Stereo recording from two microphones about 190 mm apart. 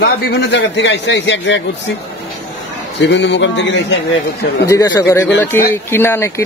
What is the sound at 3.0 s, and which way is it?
Speech, 70° left (ahead or behind).